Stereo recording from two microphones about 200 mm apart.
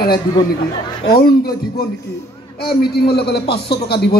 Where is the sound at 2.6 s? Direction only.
50° left (ahead or behind).